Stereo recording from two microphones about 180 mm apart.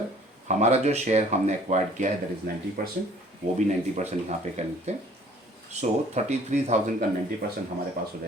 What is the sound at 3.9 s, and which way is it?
Speech, 40° right (ahead or behind).